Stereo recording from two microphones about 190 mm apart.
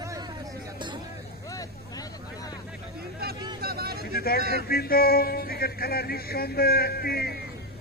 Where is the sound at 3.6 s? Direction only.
55° right (ahead or behind).